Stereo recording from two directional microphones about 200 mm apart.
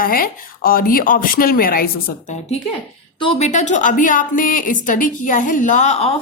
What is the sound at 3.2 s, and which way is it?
A woman's voice, 30° left (ahead or behind).